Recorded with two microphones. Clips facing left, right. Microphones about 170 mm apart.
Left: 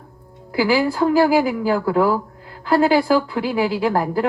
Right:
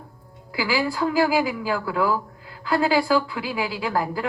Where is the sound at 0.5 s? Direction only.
40° left (ahead or behind).